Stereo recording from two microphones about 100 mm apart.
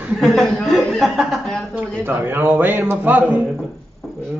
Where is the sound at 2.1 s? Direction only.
20° right (ahead or behind).